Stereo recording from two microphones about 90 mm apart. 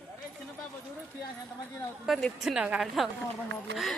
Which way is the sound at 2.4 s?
5° right (ahead or behind).